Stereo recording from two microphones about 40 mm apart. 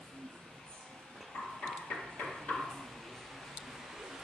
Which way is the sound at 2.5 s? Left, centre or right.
Centre.